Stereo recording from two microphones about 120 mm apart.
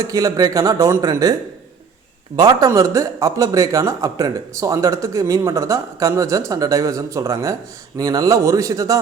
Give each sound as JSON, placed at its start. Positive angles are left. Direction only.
{"t": 0.0, "sound": "a man's voice", "side_deg": -30}